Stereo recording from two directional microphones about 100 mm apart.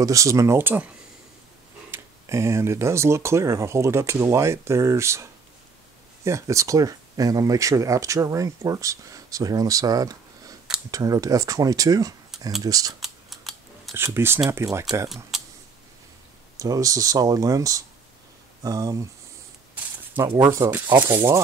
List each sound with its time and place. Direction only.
0.0 s speech: 35° right (ahead or behind)
1.9 s speech: 30° right (ahead or behind)
13.0 s scissors: centre (ahead or behind)
13.9 s speech: 25° right (ahead or behind)
15.3 s a sound: centre (ahead or behind)
16.5 s speech: 35° right (ahead or behind)
19.7 s a sound: 20° right (ahead or behind)
20.4 s speech: 30° right (ahead or behind)